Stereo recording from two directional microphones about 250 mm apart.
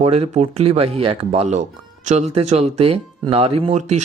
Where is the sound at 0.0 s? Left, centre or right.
Right.